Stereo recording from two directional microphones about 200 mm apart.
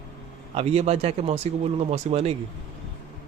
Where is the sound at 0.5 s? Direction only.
30° right (ahead or behind).